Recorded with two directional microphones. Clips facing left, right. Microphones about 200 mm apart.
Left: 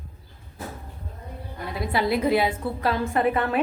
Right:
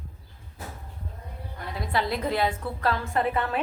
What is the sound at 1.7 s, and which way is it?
A woman's voice, 10° left (ahead or behind).